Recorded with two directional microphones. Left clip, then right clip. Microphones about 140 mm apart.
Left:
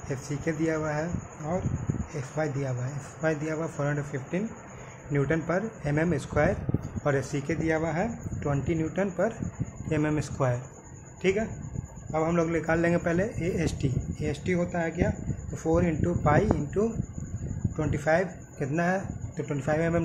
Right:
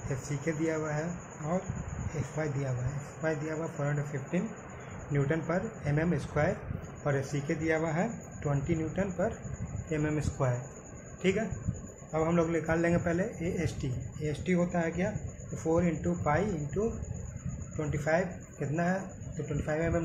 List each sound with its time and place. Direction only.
0.1 s a man's voice: 45° left (ahead or behind)
2.1 s a man's voice: 45° left (ahead or behind)
5.1 s a man's voice: 50° left (ahead or behind)
11.2 s a man's voice: 40° left (ahead or behind)